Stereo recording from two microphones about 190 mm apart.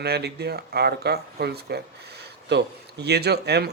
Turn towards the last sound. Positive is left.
turn(degrees=-60)  # may be behind; listen again after turning